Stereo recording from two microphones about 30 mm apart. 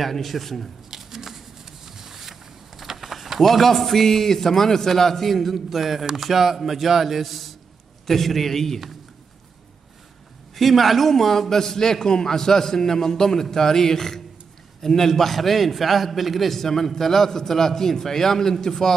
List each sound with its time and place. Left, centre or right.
0.0 s a man's voice: centre
0.9 s a sound: centre
3.0 s a man's voice: centre
10.5 s a man's voice: centre